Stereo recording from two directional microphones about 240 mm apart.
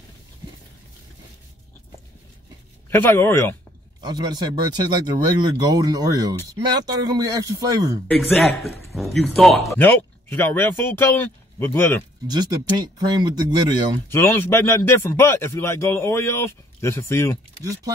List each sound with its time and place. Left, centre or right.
2.9 s speech: centre
4.0 s speech: centre
8.1 s speech: centre
12.3 s speech: centre
14.0 s speech: centre